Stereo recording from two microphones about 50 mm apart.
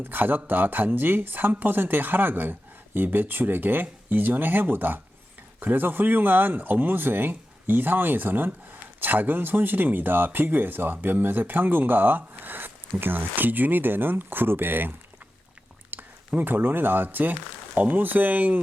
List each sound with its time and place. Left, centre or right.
0.0 s speech: right
15.9 s a sound: right
16.4 s speech: right